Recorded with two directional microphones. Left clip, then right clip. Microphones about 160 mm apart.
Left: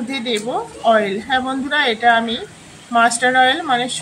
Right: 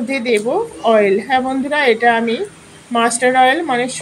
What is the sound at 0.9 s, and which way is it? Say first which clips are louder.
Speech: right 4 dB; 50° left (ahead or behind).